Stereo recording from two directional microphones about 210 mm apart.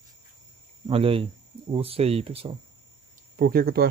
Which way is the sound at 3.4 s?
45° right (ahead or behind).